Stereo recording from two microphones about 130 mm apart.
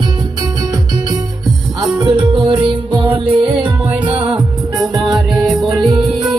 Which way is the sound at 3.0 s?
15° right (ahead or behind).